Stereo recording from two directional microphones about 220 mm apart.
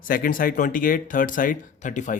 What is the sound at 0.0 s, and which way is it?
Speech, 40° left (ahead or behind).